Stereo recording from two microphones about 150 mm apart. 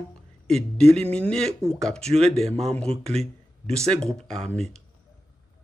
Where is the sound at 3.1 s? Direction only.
45° right (ahead or behind).